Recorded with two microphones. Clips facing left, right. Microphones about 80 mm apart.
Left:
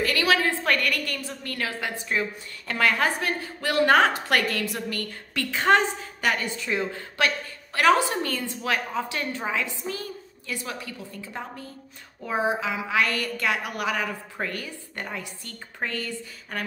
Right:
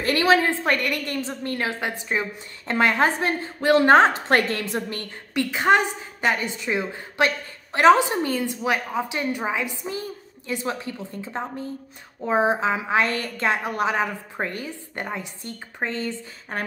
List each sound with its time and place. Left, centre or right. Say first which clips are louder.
0.0 s a woman's voice: right 4 dB; right